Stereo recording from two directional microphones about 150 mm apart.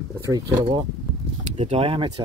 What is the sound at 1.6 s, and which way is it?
Speech, 40° right (ahead or behind).